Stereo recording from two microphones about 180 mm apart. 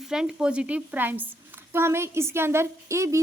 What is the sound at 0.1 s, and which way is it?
A woman's voice, 5° right (ahead or behind).